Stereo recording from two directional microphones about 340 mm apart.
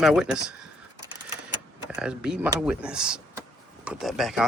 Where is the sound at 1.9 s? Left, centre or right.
Centre.